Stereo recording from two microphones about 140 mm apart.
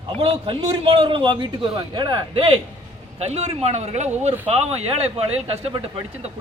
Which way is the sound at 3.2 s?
50° right (ahead or behind).